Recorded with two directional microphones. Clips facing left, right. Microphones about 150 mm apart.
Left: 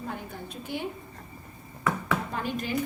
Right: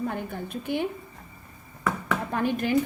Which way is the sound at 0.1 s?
55° right (ahead or behind).